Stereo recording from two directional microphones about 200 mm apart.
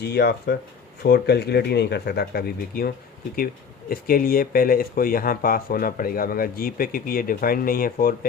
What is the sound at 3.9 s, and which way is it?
Speech, 45° left (ahead or behind).